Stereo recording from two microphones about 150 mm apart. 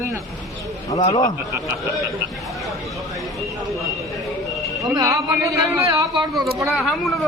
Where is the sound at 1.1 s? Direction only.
25° left (ahead or behind).